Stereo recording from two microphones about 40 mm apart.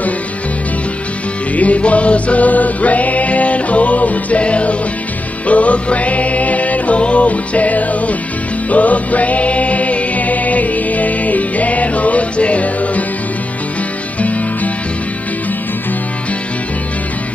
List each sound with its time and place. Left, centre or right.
1.6 s music: left